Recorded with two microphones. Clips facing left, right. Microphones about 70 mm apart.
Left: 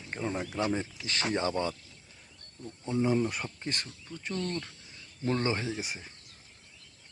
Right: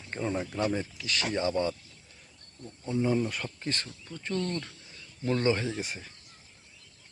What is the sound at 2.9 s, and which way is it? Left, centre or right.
Speech, centre.